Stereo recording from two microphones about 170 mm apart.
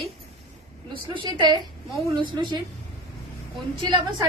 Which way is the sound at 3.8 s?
30° right (ahead or behind).